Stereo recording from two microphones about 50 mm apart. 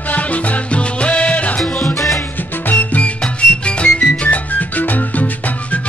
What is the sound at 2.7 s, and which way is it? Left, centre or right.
Music, left.